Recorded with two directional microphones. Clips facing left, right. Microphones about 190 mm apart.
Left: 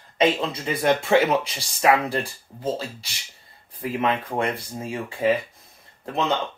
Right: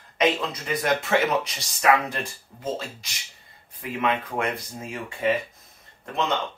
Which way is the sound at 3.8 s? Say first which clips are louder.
Left 2 dB; 35° left (ahead or behind).